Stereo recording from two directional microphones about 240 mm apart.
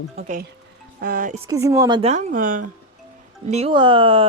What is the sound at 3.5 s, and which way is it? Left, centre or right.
Speech, right.